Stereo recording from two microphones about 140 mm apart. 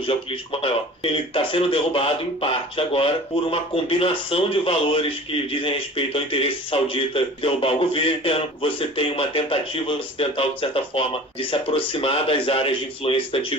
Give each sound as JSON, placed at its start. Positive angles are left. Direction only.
{"t": 0.0, "sound": "a man's voice", "side_deg": 40}